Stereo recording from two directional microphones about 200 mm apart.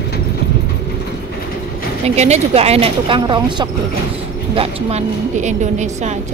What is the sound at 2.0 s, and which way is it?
A woman's voice, 35° right (ahead or behind).